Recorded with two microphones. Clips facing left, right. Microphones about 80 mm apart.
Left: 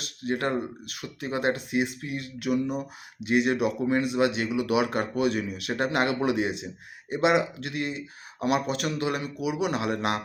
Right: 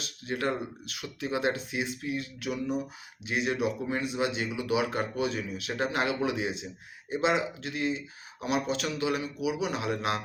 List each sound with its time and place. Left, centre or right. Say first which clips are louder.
0.0 s speech: left 3 dB; left